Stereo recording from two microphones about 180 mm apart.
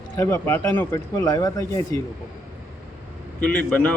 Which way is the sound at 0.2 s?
15° left (ahead or behind).